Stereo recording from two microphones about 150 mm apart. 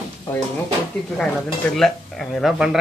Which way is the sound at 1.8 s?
5° left (ahead or behind).